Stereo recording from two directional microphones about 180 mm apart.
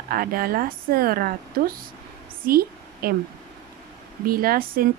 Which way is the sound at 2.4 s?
55° right (ahead or behind).